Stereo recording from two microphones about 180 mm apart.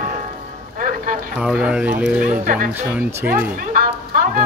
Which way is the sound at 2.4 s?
45° right (ahead or behind).